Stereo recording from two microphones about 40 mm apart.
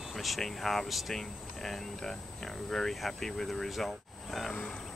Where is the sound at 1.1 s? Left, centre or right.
Centre.